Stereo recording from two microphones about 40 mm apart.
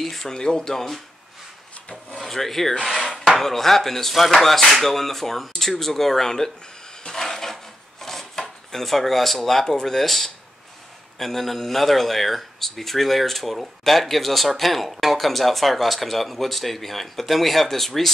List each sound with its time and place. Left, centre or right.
0.0 s speech: centre
0.4 s speech: centre
2.1 s speech: centre
7.1 s a sound: centre
11.1 s speech: centre